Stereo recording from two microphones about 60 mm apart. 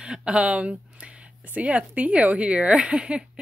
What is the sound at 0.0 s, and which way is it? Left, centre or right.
A woman's voice, centre.